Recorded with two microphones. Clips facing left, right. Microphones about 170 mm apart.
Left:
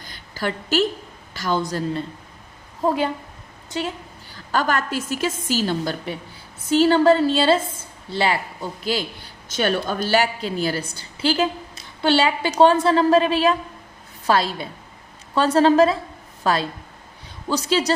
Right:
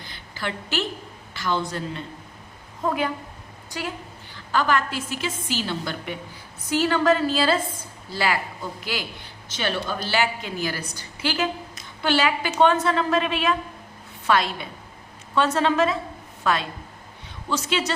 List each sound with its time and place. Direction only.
0.0 s a sound: 40° left (ahead or behind)
1.3 s a woman's voice: 40° left (ahead or behind); by 3.9 s 25° left (ahead or behind)
4.5 s a woman's voice: 45° left (ahead or behind)
9.6 s a woman's voice: 45° left (ahead or behind)